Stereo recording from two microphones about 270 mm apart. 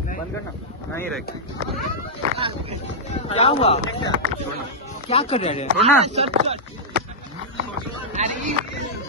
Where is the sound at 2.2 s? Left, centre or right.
Right.